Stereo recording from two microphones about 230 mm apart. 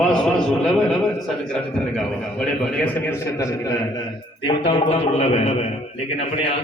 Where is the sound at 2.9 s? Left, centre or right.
Centre.